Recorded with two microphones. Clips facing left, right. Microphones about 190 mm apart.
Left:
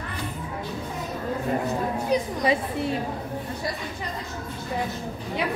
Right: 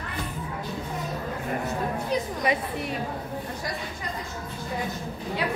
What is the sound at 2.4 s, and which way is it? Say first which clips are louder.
Speech: left 3 dB; 25° left (ahead or behind).